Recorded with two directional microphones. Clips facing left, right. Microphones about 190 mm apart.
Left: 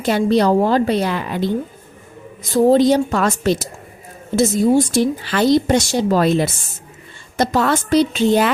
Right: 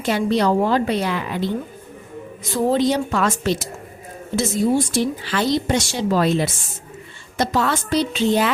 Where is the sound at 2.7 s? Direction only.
40° left (ahead or behind).